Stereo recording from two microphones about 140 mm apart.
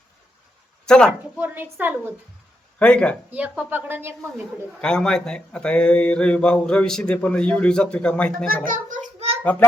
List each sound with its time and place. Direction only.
0.9 s speech: 5° left (ahead or behind)
1.4 s speech: 15° right (ahead or behind)
2.7 s speech: 10° left (ahead or behind)
3.2 s speech: 10° right (ahead or behind)
4.8 s speech: 5° left (ahead or behind)
8.6 s a child's voice: 70° right (ahead or behind)
9.4 s a child's voice: 10° left (ahead or behind)